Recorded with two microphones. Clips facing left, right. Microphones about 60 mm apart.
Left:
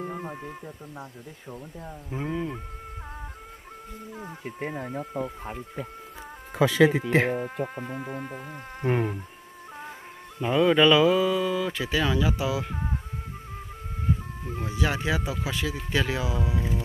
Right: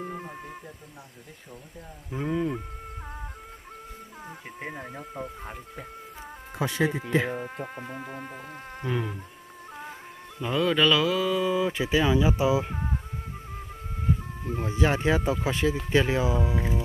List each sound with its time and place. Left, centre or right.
0.0 s music: centre
2.1 s music: centre
4.2 s music: centre
6.8 s speech: left
7.3 s music: centre
8.8 s insect: left
10.4 s speech: centre
11.2 s music: centre
11.5 s speech: centre
14.6 s speech: right